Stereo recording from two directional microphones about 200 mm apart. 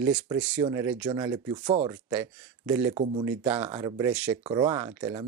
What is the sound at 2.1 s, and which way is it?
Speech, 5° right (ahead or behind).